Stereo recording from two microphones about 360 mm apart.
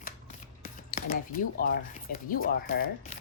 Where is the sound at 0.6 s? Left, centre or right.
Left.